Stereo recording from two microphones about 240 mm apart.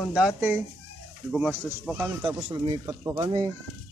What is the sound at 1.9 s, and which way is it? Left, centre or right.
Speech, centre.